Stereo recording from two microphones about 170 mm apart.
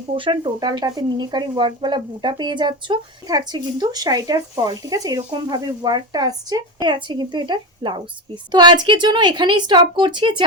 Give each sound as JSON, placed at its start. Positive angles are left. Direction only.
{"t": 0.1, "sound": "speech", "side_deg": -30}